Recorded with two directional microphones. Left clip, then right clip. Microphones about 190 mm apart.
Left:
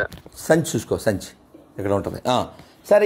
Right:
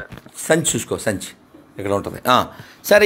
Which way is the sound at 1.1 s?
20° left (ahead or behind).